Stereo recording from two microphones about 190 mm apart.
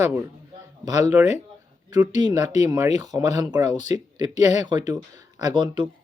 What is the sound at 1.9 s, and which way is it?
Speech, 20° right (ahead or behind).